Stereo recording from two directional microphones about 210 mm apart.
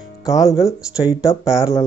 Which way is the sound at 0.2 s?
15° left (ahead or behind).